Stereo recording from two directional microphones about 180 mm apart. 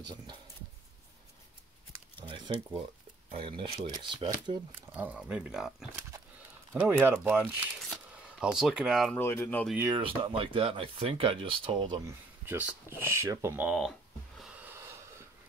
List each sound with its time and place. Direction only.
2.2 s a sound: 25° right (ahead or behind)
3.3 s speech: 30° right (ahead or behind)
4.7 s speech: 10° right (ahead or behind)
9.2 s speech: 15° left (ahead or behind)
9.8 s speech: 25° right (ahead or behind)
12.1 s speech: 10° right (ahead or behind)
13.0 s a sound: 15° right (ahead or behind)